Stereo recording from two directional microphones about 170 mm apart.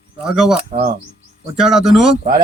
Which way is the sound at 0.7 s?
45° right (ahead or behind).